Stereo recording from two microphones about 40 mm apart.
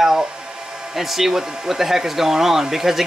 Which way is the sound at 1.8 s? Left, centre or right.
Centre.